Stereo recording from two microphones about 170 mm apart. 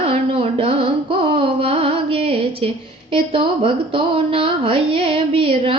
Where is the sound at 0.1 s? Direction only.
35° right (ahead or behind).